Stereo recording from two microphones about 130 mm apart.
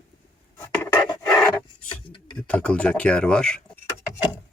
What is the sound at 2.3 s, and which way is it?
Speech, 10° left (ahead or behind).